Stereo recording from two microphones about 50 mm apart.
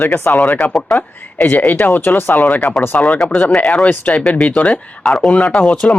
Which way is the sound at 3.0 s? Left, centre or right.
Centre.